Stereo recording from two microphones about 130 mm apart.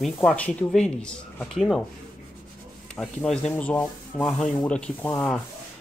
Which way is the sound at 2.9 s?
5° left (ahead or behind).